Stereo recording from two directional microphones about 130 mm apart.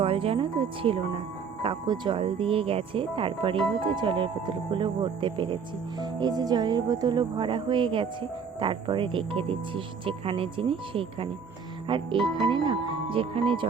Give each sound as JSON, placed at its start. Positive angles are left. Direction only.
{"t": 0.0, "sound": "speech", "side_deg": -45}